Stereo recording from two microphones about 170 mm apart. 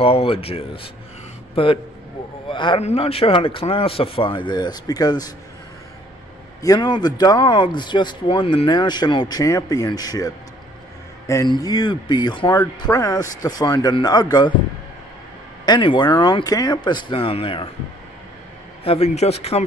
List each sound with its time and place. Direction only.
0.0 s a man's voice: 35° left (ahead or behind)
6.6 s speech: 25° left (ahead or behind)
15.6 s speech: 25° left (ahead or behind)
18.9 s a man's voice: 40° left (ahead or behind)